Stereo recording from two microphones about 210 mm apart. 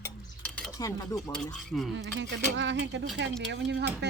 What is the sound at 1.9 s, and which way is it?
Speech, 60° right (ahead or behind).